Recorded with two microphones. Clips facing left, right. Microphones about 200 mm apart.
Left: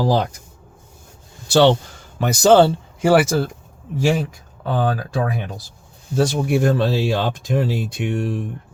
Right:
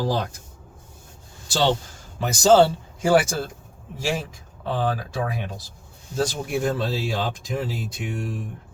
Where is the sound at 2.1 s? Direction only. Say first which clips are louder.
Left 3 dB; 65° left (ahead or behind).